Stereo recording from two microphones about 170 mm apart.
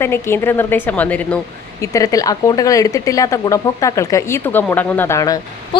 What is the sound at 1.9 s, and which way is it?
A woman's voice, 20° left (ahead or behind).